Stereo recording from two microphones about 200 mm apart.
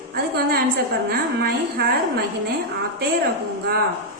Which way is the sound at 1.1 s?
50° right (ahead or behind).